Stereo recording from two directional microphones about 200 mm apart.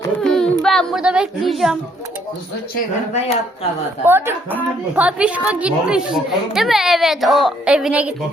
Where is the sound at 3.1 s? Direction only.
30° left (ahead or behind).